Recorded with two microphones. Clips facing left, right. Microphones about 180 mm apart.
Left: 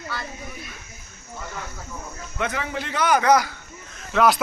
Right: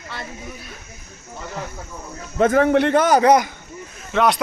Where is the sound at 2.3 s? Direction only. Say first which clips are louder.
Right 13 dB; 45° right (ahead or behind).